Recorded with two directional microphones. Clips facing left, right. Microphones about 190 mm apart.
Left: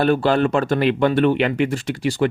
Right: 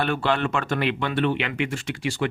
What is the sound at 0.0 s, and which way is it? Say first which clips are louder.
Speech: left 7 dB; 40° left (ahead or behind).